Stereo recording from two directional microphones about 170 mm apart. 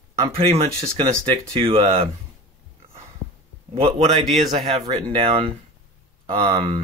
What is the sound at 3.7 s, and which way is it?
Speech, 35° right (ahead or behind).